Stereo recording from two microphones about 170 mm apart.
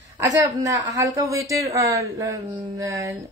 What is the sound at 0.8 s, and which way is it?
Speech, 20° right (ahead or behind).